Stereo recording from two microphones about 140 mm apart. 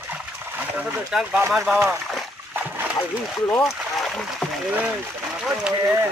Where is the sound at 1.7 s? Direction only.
15° right (ahead or behind).